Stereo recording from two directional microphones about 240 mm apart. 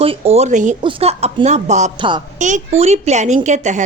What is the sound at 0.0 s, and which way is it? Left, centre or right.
Speech, right.